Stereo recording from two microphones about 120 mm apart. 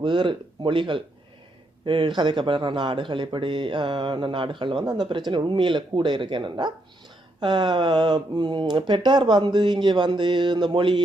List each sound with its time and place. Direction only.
0.0 s speech: 40° right (ahead or behind)